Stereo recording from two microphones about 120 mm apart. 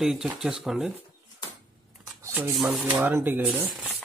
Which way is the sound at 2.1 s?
25° right (ahead or behind).